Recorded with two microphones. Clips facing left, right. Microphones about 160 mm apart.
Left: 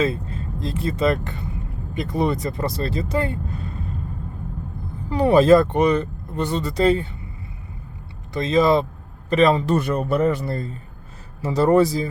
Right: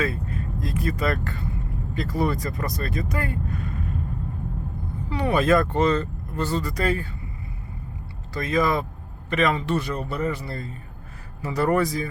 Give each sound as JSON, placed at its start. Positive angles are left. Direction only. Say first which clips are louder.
{"t": 0.0, "sound": "speech", "louder": "left 4 dB", "side_deg": 25}
{"t": 5.0, "sound": "speech", "louder": "left 7 dB", "side_deg": 35}
{"t": 5.7, "sound": "speech", "louder": "left 3 dB", "side_deg": 15}
{"t": 8.3, "sound": "speech", "louder": "left 6 dB", "side_deg": 25}
{"t": 9.8, "sound": "speech", "louder": "left 7 dB", "side_deg": 55}
{"t": 11.4, "sound": "speech", "louder": "left 6 dB", "side_deg": 25}